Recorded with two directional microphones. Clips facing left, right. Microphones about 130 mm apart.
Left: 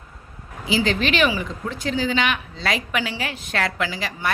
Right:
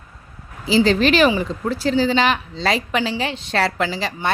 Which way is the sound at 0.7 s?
35° right (ahead or behind).